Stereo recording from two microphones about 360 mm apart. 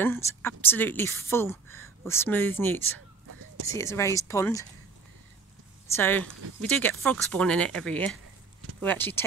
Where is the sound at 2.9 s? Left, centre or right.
Right.